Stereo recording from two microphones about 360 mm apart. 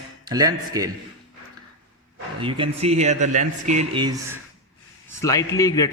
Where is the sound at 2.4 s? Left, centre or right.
Centre.